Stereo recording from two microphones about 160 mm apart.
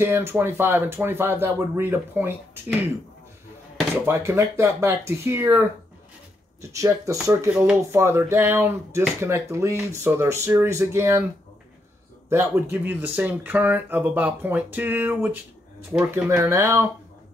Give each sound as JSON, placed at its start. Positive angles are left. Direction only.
{"t": 0.0, "sound": "speech", "side_deg": -15}
{"t": 3.9, "sound": "speech", "side_deg": -15}
{"t": 6.7, "sound": "speech", "side_deg": -20}
{"t": 7.5, "sound": "speech", "side_deg": -5}
{"t": 7.9, "sound": "speech", "side_deg": -15}
{"t": 12.3, "sound": "speech", "side_deg": -15}